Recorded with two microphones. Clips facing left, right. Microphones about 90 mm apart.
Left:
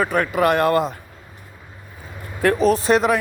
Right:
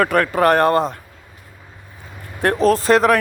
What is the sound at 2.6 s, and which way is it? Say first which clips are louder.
Speech: right 4 dB; 40° right (ahead or behind).